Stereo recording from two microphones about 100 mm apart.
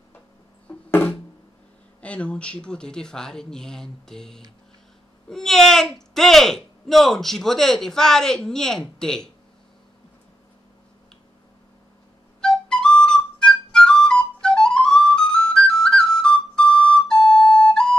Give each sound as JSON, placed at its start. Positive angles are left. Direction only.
{"t": 0.7, "sound": "music", "side_deg": 20}
{"t": 2.0, "sound": "speech", "side_deg": 10}
{"t": 12.4, "sound": "flute", "side_deg": 5}